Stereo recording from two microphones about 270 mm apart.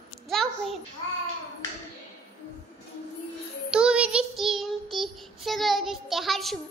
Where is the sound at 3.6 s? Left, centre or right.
Centre.